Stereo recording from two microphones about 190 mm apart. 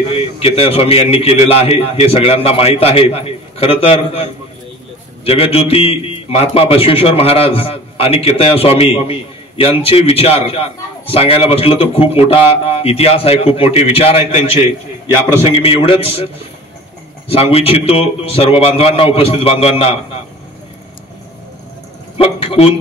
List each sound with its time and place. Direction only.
0.1 s a man's voice: 30° left (ahead or behind)
17.3 s a man's voice: 30° left (ahead or behind)
22.1 s a man's voice: 30° left (ahead or behind)